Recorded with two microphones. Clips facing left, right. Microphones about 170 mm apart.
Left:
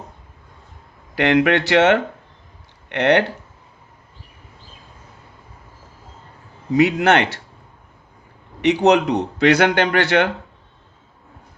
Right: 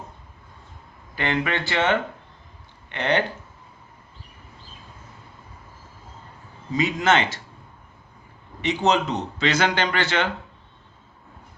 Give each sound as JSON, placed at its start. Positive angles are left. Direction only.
{"t": 1.1, "sound": "speech", "side_deg": 75}
{"t": 6.7, "sound": "speech", "side_deg": 70}
{"t": 8.6, "sound": "speech", "side_deg": 65}